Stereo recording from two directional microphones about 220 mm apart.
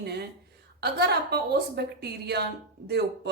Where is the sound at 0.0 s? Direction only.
45° right (ahead or behind).